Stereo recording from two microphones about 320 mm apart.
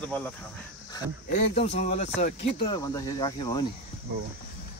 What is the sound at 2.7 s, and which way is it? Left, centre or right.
Speech, centre.